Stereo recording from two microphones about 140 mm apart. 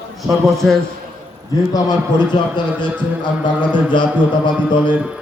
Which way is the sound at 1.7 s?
25° left (ahead or behind).